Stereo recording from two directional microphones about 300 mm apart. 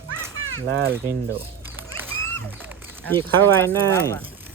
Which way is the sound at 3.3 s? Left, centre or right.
Centre.